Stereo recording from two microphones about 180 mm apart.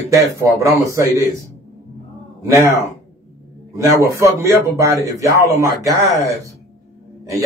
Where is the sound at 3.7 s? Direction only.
15° right (ahead or behind).